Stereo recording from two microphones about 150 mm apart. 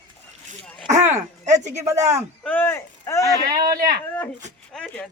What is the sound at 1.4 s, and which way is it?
Speech, 50° right (ahead or behind).